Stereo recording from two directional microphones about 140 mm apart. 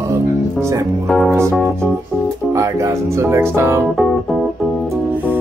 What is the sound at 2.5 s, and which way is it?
Music, 20° right (ahead or behind).